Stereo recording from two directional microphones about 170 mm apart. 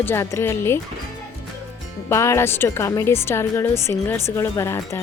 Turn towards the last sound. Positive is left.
turn(degrees=15)  # may be behind; listen again after turning